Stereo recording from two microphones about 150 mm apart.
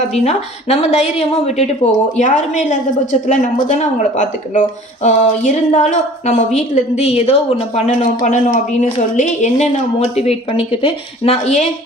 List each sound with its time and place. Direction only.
0.1 s a woman's voice: 45° left (ahead or behind)